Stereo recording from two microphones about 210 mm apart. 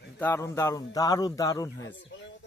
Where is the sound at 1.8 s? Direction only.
60° left (ahead or behind).